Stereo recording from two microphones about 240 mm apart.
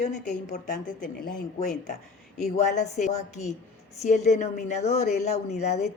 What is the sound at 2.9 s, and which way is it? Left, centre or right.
A woman's voice, left.